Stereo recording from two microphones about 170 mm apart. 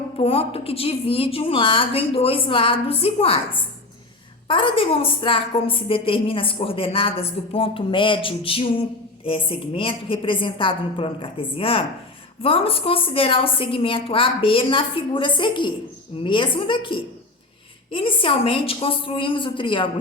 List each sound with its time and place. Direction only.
0.2 s a woman's voice: 35° left (ahead or behind)